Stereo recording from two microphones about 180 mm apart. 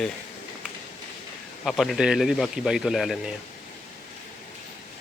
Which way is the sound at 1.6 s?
Centre (ahead or behind).